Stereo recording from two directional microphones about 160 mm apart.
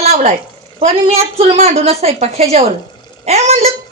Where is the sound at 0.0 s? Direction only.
40° right (ahead or behind).